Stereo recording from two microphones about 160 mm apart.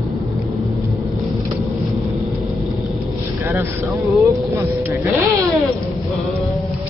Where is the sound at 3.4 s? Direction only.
15° right (ahead or behind).